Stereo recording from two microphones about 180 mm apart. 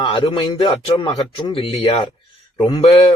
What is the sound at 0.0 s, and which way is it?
Speech, 30° left (ahead or behind).